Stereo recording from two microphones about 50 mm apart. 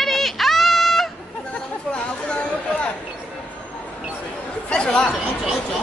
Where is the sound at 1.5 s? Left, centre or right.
Left.